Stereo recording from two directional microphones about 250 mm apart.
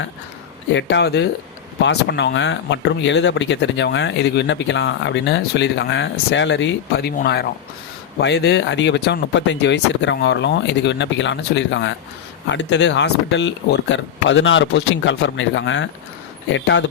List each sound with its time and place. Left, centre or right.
0.7 s speech: left